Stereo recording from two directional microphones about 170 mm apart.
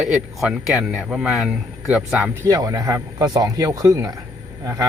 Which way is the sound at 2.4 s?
20° right (ahead or behind).